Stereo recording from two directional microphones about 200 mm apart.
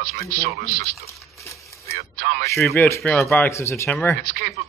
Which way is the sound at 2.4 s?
15° left (ahead or behind).